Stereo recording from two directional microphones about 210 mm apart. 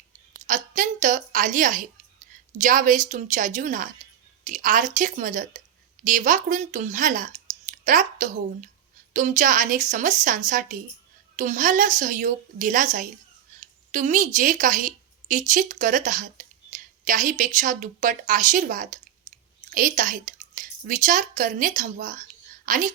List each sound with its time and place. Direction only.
0.4 s a woman's voice: 40° right (ahead or behind)
19.3 s clicking: 35° right (ahead or behind)
19.7 s speech: 40° right (ahead or behind)